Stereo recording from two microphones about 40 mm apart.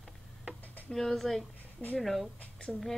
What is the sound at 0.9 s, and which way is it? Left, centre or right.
Speech, centre.